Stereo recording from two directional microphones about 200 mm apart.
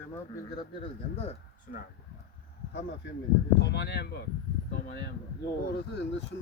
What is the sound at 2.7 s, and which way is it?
Speech, 65° left (ahead or behind).